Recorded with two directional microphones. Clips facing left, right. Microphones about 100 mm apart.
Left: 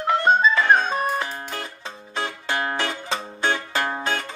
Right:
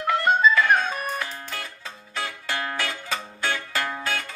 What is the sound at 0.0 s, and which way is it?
Music, 25° left (ahead or behind).